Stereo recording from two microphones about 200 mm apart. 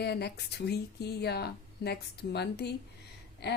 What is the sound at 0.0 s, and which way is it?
A woman's voice, 55° left (ahead or behind).